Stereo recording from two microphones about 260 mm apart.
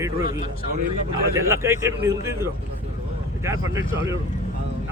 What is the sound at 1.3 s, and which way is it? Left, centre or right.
A man's voice, centre.